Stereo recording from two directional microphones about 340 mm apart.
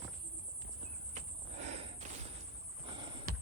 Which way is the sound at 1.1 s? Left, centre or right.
Centre.